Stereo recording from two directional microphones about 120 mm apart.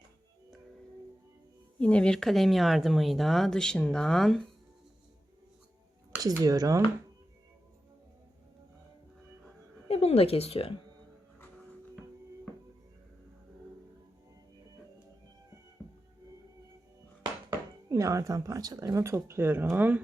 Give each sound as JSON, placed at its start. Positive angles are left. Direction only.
{"t": 1.8, "sound": "speech", "side_deg": 10}
{"t": 6.2, "sound": "speech", "side_deg": -30}
{"t": 9.9, "sound": "speech", "side_deg": 60}
{"t": 15.8, "sound": "music", "side_deg": 5}
{"t": 17.8, "sound": "speech", "side_deg": -25}